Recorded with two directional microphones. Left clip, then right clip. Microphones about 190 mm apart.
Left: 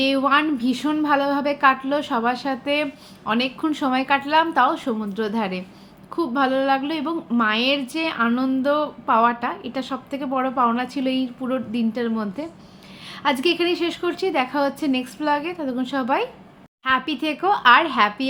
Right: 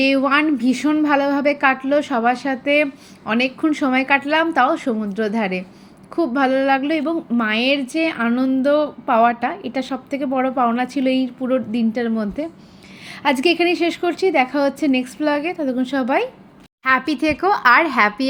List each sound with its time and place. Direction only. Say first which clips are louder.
0.0 s a woman's voice: right 2 dB; 10° right (ahead or behind); by 18.3 s 25° right (ahead or behind)